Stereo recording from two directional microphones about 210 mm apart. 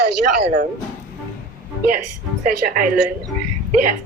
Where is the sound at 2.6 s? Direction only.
40° right (ahead or behind).